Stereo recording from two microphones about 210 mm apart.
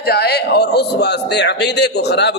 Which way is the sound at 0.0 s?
50° left (ahead or behind).